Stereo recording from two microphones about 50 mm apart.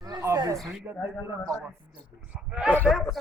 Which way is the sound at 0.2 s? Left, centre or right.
Right.